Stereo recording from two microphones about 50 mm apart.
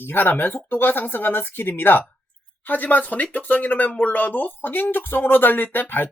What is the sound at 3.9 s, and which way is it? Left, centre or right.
Speech, left.